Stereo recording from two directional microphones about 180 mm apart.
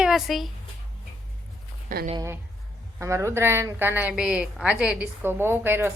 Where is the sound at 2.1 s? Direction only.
15° right (ahead or behind).